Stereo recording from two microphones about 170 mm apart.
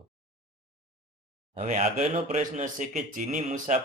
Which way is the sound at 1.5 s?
40° right (ahead or behind).